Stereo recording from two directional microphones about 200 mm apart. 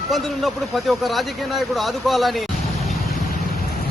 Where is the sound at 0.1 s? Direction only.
Centre (ahead or behind).